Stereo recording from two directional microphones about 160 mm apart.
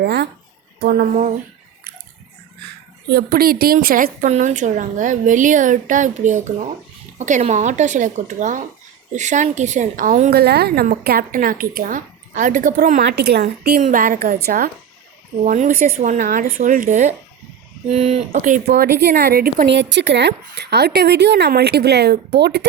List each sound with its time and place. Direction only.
0.0 s a woman's voice: 90° right
0.8 s a woman's voice: 70° right (ahead or behind); by 1.3 s 55° right (ahead or behind)
3.2 s a woman's voice: 70° right (ahead or behind); by 10.3 s 50° right (ahead or behind)
10.3 s a woman's voice: 85° right
13.8 s a woman's voice: 55° right (ahead or behind)
15.4 s a woman's voice: 55° right (ahead or behind)
17.8 s speech: 40° right (ahead or behind)
18.3 s a woman's voice: 55° right (ahead or behind); by 22.6 s 90° right